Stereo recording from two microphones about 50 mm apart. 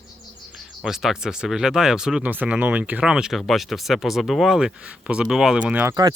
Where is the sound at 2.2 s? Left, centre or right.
Right.